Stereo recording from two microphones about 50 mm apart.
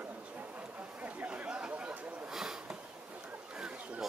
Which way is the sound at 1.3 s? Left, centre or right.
Centre.